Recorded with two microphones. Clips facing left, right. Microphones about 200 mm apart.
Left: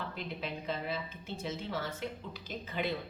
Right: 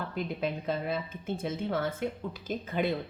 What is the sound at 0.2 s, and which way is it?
A woman's voice, 50° right (ahead or behind).